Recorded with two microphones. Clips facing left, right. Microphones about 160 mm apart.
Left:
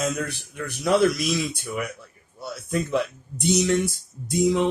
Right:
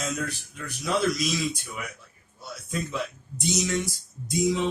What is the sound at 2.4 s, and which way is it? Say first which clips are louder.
Speech: left 6 dB; 60° left (ahead or behind).